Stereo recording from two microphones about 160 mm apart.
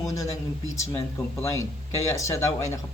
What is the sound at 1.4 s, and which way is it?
Speech, 20° left (ahead or behind).